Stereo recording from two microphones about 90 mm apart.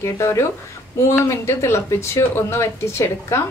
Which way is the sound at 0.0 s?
30° left (ahead or behind).